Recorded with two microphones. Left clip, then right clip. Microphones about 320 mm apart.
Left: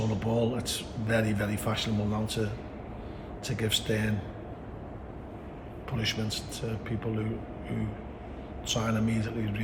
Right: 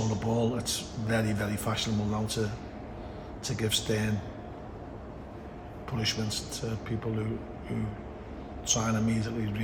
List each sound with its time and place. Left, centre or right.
0.2 s a man's voice: centre
3.4 s a man's voice: centre
6.0 s a man's voice: centre
8.6 s a man's voice: centre